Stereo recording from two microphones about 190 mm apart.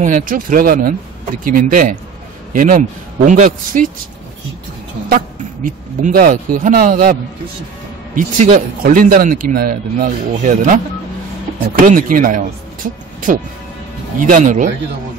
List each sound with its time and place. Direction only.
0.0 s speech: 45° right (ahead or behind)
5.1 s speech: 45° right (ahead or behind)